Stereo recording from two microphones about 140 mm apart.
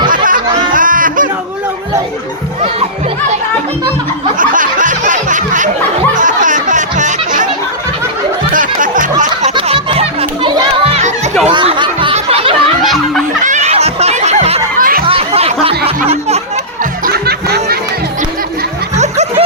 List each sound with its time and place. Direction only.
0.1 s music: 70° right (ahead or behind)
4.4 s snicker: 70° right (ahead or behind)
6.1 s music: 65° right (ahead or behind)
8.5 s music: 70° right (ahead or behind)
9.6 s music: 40° right (ahead or behind)
11.5 s a sound: 35° right (ahead or behind)
12.8 s a sound: centre (ahead or behind)
13.4 s music: 60° right (ahead or behind)
14.8 s a sound: 90° right
15.0 s chatter: 40° right (ahead or behind)
18.9 s snicker: 50° right (ahead or behind)